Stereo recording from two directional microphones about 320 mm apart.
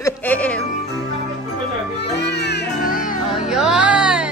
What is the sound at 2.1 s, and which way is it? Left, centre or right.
Music, left.